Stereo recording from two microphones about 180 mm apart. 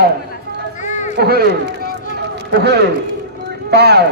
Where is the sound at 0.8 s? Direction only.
40° left (ahead or behind).